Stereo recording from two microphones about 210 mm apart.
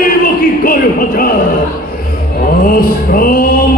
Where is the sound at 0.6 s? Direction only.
45° left (ahead or behind).